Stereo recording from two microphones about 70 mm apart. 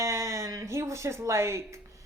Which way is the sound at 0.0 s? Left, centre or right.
Right.